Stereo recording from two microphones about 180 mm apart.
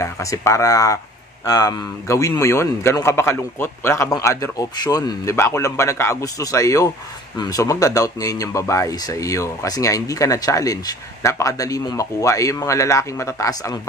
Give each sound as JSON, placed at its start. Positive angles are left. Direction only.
{"t": 0.0, "sound": "speech", "side_deg": 15}